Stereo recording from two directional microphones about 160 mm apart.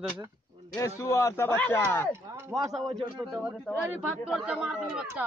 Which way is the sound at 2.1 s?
15° right (ahead or behind).